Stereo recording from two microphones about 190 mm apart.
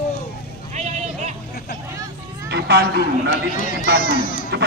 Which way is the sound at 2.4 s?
65° right (ahead or behind).